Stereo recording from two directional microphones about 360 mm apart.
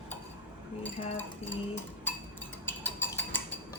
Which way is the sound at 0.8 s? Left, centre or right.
Centre.